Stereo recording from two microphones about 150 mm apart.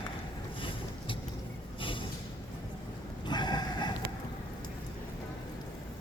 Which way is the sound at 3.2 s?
30° left (ahead or behind).